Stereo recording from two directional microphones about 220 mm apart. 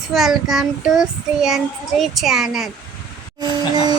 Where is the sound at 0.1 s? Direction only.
Centre (ahead or behind).